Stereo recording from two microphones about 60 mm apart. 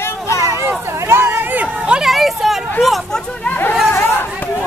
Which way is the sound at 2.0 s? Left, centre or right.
Centre.